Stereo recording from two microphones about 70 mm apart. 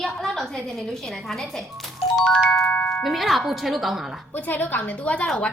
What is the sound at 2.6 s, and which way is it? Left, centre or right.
Music, centre.